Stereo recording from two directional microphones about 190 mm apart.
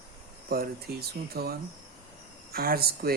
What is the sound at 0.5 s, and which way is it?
Speech, 50° right (ahead or behind).